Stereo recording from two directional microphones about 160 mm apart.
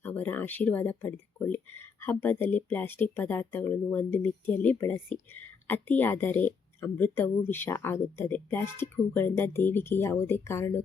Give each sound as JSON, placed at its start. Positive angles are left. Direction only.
{"t": 0.0, "sound": "a woman's voice", "side_deg": 10}